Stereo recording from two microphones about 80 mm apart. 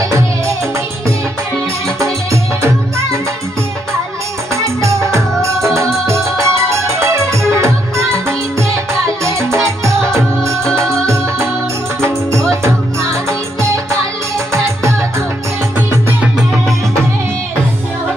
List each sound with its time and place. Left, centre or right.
4.6 s music: right
9.2 s music: right
12.0 s music: right
14.5 s music: right